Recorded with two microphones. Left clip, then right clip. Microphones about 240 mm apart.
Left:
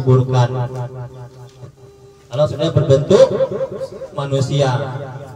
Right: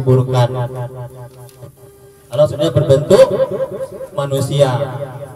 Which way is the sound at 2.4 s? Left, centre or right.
Right.